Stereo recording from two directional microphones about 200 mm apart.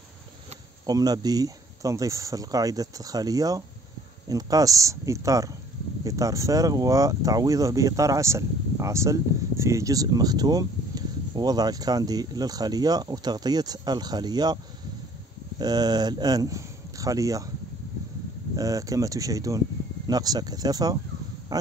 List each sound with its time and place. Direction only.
0.8 s speech: 20° right (ahead or behind)
15.6 s speech: 20° right (ahead or behind)
18.6 s speech: 15° right (ahead or behind)
21.5 s a sound: 20° right (ahead or behind)